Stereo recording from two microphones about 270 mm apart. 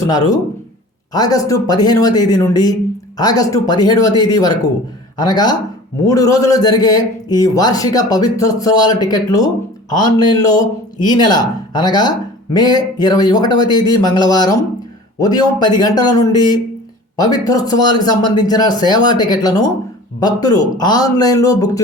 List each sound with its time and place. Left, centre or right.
0.0 s a man's voice: centre
17.2 s a man's voice: centre